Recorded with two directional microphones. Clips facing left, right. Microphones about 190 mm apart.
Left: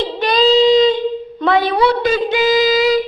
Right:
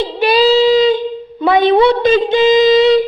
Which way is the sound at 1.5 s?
25° right (ahead or behind).